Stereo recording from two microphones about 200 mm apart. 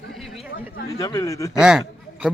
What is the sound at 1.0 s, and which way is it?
Speech, 20° left (ahead or behind).